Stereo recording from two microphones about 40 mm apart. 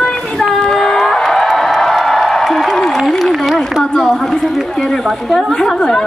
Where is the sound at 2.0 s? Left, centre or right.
Centre.